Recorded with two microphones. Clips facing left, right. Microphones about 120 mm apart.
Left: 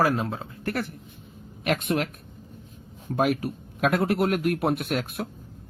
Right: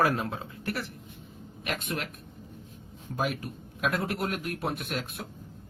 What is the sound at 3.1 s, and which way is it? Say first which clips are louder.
Speech: left 7 dB; 60° left (ahead or behind).